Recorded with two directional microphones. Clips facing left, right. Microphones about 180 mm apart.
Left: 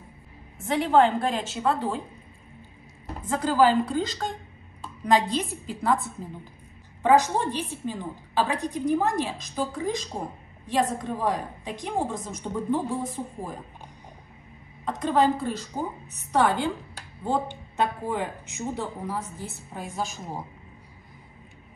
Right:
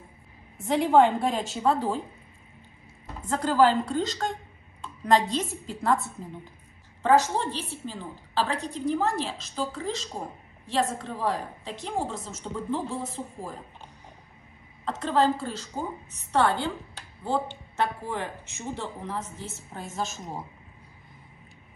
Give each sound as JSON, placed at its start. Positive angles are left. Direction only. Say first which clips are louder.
{"t": 0.7, "sound": "a woman's voice", "louder": "right 1 dB", "side_deg": 0}
{"t": 3.3, "sound": "a woman's voice", "louder": "left 1 dB", "side_deg": 5}
{"t": 7.0, "sound": "a woman's voice", "louder": "left 2 dB", "side_deg": 15}
{"t": 14.9, "sound": "a woman's voice", "louder": "left 2 dB", "side_deg": 15}